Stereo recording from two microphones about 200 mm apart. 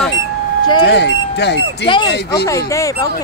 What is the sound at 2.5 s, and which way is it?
Speech, 15° left (ahead or behind).